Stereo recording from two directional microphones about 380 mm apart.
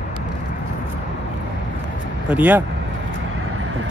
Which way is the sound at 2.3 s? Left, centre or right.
Centre.